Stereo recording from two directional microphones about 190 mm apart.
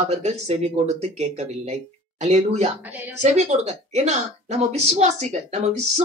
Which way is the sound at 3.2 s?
35° right (ahead or behind).